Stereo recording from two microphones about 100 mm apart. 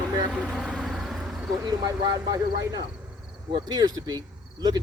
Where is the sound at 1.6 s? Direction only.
40° right (ahead or behind).